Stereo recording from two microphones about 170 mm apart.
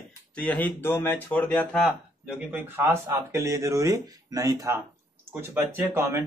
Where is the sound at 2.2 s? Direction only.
10° right (ahead or behind).